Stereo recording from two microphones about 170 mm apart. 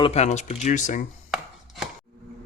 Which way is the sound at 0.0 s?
40° left (ahead or behind).